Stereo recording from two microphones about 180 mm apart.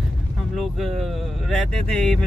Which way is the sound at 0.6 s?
Centre (ahead or behind).